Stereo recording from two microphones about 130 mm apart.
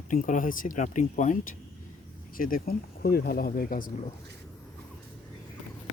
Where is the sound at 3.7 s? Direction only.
90° left.